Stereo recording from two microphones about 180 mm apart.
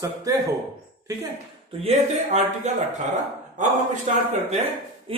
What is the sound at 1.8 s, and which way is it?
Speech, 40° right (ahead or behind).